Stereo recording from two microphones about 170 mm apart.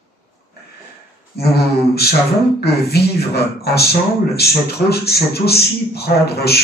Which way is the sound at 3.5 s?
70° left (ahead or behind).